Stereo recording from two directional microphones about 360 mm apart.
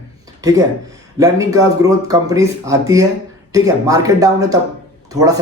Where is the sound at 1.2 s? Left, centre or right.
Centre.